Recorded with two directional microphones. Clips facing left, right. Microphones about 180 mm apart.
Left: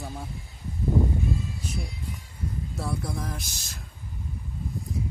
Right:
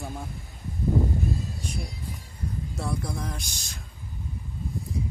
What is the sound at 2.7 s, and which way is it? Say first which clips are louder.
Speech: even; centre (ahead or behind).